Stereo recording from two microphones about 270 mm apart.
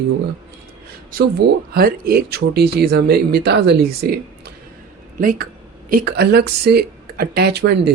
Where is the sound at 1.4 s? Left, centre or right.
Right.